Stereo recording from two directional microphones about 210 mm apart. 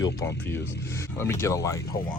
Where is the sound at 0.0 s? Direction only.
15° left (ahead or behind).